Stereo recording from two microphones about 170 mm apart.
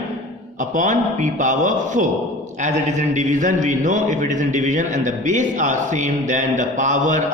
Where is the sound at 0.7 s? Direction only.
45° right (ahead or behind).